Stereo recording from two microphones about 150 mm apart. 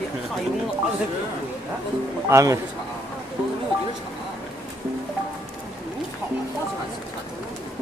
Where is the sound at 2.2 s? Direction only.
20° right (ahead or behind).